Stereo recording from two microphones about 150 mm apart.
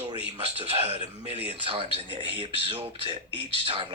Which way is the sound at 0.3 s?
40° right (ahead or behind).